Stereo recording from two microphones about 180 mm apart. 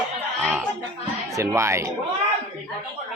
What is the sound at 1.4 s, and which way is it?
Speech, 15° right (ahead or behind).